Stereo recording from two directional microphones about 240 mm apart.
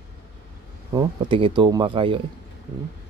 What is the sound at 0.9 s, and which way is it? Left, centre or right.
Speech, centre.